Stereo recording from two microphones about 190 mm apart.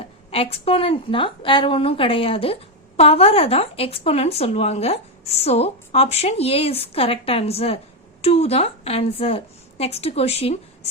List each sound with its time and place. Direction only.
0.3 s a woman's voice: 30° left (ahead or behind)